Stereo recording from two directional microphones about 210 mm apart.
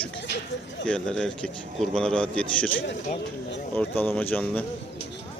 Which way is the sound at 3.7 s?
10° left (ahead or behind).